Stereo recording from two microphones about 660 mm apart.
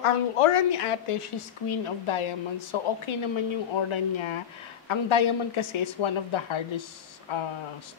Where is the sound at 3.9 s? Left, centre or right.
Left.